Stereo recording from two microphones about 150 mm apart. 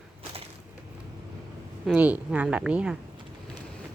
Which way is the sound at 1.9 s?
10° right (ahead or behind).